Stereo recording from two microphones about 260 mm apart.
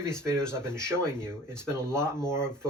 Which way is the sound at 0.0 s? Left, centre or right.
Centre.